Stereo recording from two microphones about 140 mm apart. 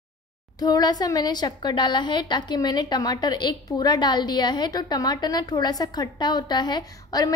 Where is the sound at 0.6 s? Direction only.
30° left (ahead or behind).